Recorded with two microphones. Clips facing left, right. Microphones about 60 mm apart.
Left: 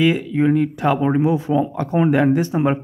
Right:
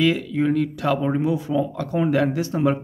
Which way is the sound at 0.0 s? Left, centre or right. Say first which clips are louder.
Left 3 dB; centre.